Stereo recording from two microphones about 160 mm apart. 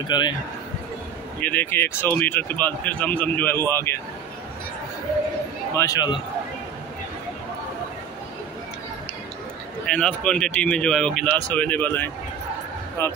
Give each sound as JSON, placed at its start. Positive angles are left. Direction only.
{"t": 0.0, "sound": "a man's voice", "side_deg": 25}
{"t": 1.4, "sound": "speech", "side_deg": 10}
{"t": 5.8, "sound": "a man's voice", "side_deg": 25}
{"t": 9.8, "sound": "speech", "side_deg": 5}